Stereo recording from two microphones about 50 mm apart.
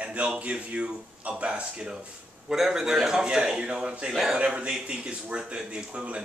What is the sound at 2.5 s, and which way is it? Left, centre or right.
A man's voice, centre.